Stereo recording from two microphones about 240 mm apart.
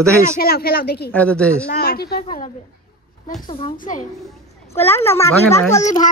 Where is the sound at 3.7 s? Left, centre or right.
Left.